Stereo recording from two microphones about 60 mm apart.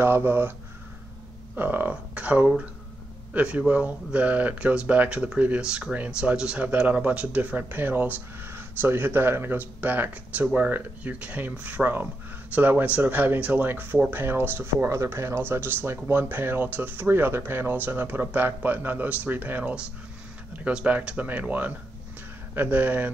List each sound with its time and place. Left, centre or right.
0.0 s speech: right
1.6 s speech: right
14.9 s speech: right